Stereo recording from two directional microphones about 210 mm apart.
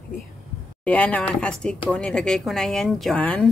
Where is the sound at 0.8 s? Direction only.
5° left (ahead or behind).